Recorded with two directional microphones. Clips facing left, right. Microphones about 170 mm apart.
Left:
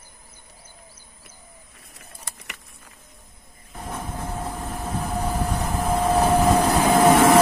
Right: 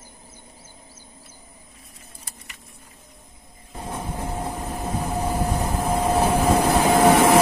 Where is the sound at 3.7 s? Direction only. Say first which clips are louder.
Right 1 dB; 20° right (ahead or behind).